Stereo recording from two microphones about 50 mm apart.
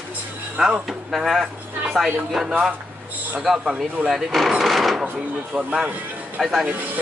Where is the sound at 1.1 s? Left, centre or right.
Centre.